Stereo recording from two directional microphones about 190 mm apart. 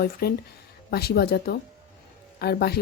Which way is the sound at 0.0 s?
55° left (ahead or behind).